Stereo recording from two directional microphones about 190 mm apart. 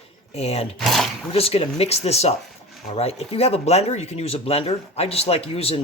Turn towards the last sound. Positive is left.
turn(degrees=30)  # may be behind; listen again after turning